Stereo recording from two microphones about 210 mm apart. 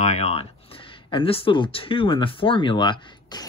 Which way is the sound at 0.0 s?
30° left (ahead or behind).